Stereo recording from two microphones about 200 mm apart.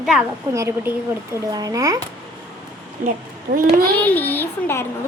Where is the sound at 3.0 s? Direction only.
45° right (ahead or behind).